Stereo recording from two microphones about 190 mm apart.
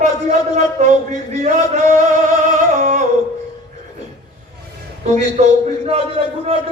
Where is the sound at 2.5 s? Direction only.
40° right (ahead or behind).